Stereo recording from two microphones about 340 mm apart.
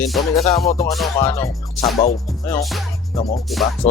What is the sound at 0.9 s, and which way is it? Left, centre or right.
Music, centre.